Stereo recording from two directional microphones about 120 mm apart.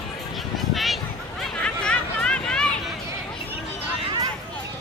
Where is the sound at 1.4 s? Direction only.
10° left (ahead or behind).